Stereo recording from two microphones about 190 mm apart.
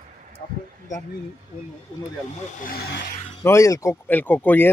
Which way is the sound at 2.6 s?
55° left (ahead or behind).